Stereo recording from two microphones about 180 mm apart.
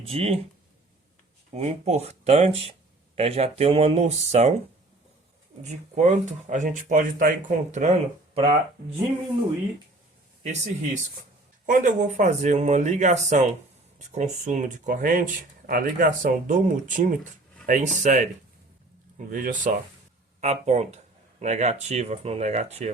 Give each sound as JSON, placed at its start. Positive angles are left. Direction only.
{"t": 0.0, "sound": "speech", "side_deg": -35}
{"t": 1.5, "sound": "speech", "side_deg": -35}
{"t": 5.6, "sound": "speech", "side_deg": -40}
{"t": 10.4, "sound": "speech", "side_deg": -40}
{"t": 19.3, "sound": "speech", "side_deg": -50}